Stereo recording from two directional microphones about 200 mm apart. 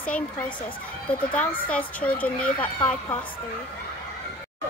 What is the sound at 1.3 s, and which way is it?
A woman's voice, 5° left (ahead or behind).